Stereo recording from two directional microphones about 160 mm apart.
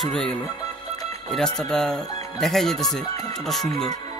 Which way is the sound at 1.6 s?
5° left (ahead or behind).